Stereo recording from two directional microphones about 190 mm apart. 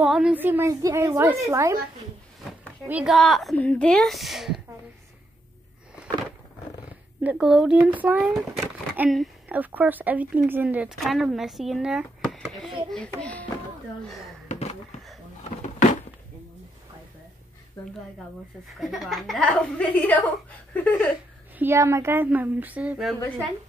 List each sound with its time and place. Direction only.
0.0 s a woman's voice: 5° right (ahead or behind)
2.9 s a woman's voice: 5° right (ahead or behind)
7.2 s a woman's voice: 5° right (ahead or behind)
14.5 s a sound: 35° left (ahead or behind)
18.8 s a woman's voice: centre (ahead or behind)
20.7 s a sound: 10° left (ahead or behind)
21.5 s a woman's voice: 15° right (ahead or behind)